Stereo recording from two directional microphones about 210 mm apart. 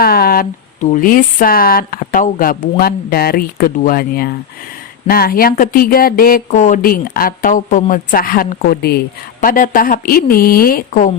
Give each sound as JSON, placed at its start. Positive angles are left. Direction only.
{"t": 0.0, "sound": "speech", "side_deg": 45}